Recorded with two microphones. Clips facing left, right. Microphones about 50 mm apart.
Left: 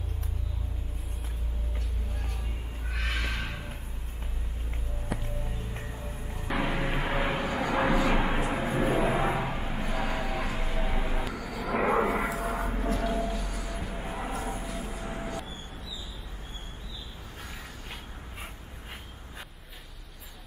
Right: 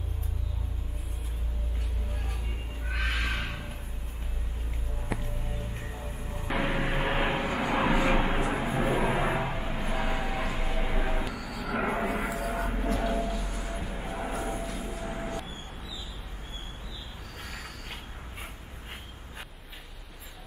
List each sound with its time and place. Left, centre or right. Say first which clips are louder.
2.9 s crow: right 2 dB; centre
5.9 s music: right 1 dB; centre
6.5 s vehicle: even; centre
7.0 s vehicle: right 3 dB; right
7.3 s vehicle: even; centre
8.1 s vehicle: right 1 dB; centre
9.0 s a sound: left 1 dB; centre
11.2 s vehicle: left 1 dB; centre
12.1 s a sound: left 2 dB; centre
13.4 s music: even; centre
13.7 s vehicle: even; centre